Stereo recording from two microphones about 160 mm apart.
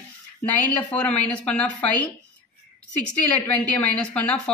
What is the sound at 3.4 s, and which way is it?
Speech, 10° left (ahead or behind).